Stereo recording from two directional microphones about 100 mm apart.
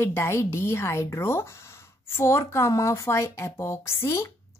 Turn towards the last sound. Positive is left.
turn(degrees=25)  # may be behind; listen again after turning